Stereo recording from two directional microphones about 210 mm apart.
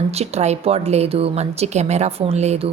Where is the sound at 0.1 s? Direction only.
30° right (ahead or behind).